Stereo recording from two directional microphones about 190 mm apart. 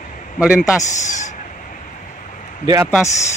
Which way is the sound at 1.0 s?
40° left (ahead or behind).